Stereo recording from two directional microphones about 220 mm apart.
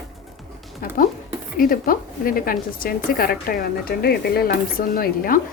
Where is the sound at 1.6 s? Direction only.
40° left (ahead or behind).